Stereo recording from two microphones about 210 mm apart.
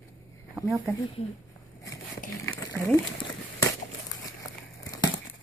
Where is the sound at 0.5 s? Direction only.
5° right (ahead or behind).